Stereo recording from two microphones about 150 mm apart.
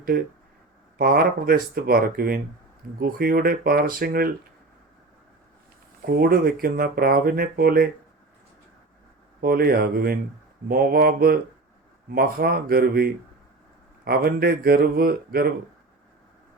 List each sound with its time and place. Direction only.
0.9 s speech: 80° right
6.0 s speech: 85° right
9.4 s speech: 90° right